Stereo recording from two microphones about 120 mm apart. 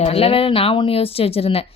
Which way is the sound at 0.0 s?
55° left (ahead or behind).